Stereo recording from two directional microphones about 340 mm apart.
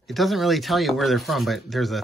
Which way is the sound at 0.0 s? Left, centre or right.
Centre.